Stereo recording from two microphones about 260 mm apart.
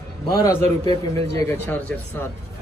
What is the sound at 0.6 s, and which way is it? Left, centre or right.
Speech, right.